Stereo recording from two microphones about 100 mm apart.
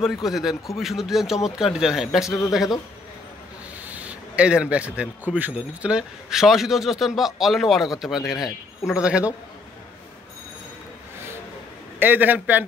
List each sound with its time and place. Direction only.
0.0 s a man's voice: centre (ahead or behind)
3.8 s a man's voice: 15° right (ahead or behind)
12.0 s a man's voice: 20° right (ahead or behind)